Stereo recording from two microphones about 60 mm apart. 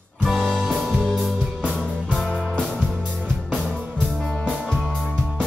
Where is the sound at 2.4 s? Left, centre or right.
Centre.